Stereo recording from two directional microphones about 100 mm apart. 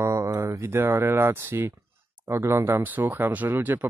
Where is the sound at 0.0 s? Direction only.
30° right (ahead or behind).